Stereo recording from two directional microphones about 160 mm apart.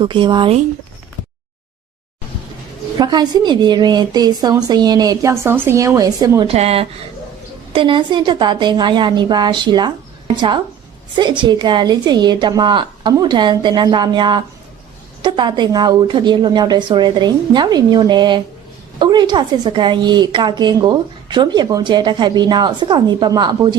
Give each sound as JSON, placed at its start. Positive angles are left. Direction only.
{"t": 0.0, "sound": "speech", "side_deg": -30}
{"t": 3.0, "sound": "a woman's voice", "side_deg": -25}
{"t": 6.5, "sound": "a woman's voice", "side_deg": -40}